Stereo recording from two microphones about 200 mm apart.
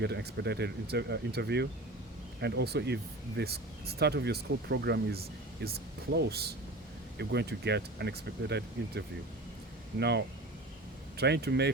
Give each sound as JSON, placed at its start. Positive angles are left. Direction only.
{"t": 0.0, "sound": "speech", "side_deg": -55}